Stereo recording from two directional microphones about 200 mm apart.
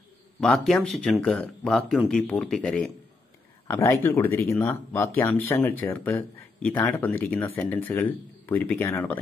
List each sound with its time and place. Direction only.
0.4 s speech: centre (ahead or behind)